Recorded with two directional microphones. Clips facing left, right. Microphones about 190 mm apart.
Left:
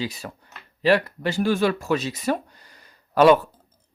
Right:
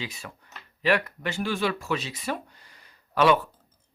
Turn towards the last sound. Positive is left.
turn(degrees=40)  # may be behind; listen again after turning